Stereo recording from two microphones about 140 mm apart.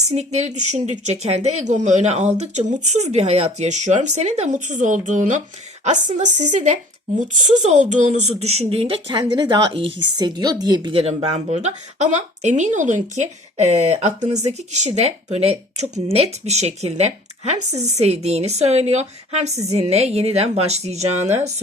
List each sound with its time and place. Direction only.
0.0 s speech: 50° right (ahead or behind); by 10.9 s 30° right (ahead or behind)
10.9 s speech: 45° right (ahead or behind)